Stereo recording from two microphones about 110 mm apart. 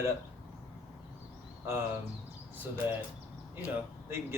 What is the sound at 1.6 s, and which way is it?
Speech, 20° right (ahead or behind).